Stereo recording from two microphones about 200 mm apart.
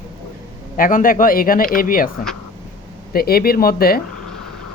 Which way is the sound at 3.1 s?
50° left (ahead or behind).